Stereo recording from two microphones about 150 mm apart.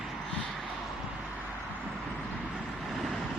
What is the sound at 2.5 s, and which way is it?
Vehicle, centre (ahead or behind).